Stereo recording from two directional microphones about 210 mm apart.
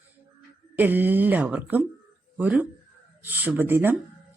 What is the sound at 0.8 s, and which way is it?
Speech, 10° right (ahead or behind).